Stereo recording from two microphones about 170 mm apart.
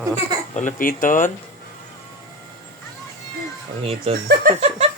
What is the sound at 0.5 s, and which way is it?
Speech, 50° left (ahead or behind).